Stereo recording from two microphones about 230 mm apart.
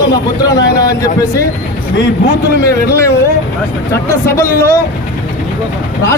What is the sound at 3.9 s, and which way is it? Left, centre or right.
Speech, centre.